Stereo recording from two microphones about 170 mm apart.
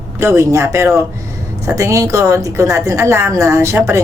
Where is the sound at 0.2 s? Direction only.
15° right (ahead or behind).